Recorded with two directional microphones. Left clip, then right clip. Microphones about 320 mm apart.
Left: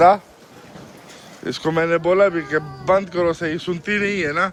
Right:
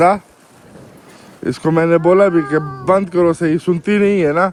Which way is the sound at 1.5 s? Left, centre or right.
Right.